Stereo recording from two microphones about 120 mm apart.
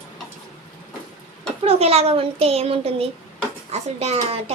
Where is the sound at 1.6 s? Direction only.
60° right (ahead or behind).